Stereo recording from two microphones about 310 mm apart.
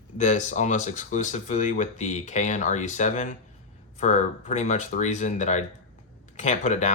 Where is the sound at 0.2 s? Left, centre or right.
Left.